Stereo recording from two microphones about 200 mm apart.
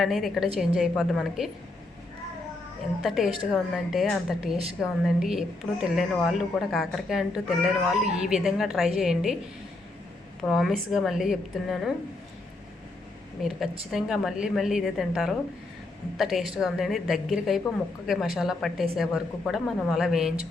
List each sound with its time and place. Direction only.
0.0 s speech: centre (ahead or behind)
3.0 s speech: centre (ahead or behind)
10.4 s speech: centre (ahead or behind)
13.9 s speech: centre (ahead or behind)